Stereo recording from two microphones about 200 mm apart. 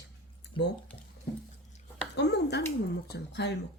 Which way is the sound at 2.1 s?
60° left (ahead or behind).